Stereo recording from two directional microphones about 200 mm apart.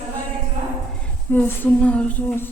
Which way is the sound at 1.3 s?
10° left (ahead or behind).